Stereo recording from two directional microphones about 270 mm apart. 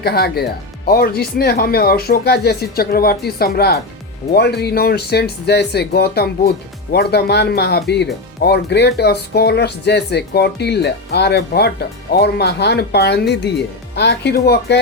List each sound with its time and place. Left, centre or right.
0.0 s speech: left